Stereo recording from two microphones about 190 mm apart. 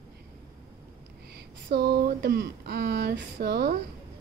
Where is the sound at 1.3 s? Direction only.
60° right (ahead or behind).